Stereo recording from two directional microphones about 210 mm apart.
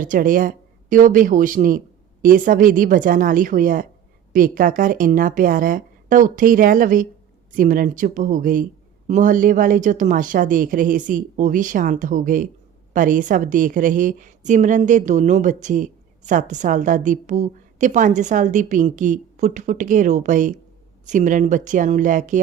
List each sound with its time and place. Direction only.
0.0 s a woman's voice: 40° right (ahead or behind)